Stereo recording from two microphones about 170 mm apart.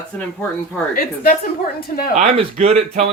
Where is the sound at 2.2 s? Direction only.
35° right (ahead or behind).